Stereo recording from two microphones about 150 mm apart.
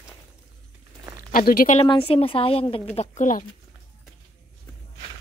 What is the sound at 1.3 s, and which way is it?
Speech, 70° left (ahead or behind).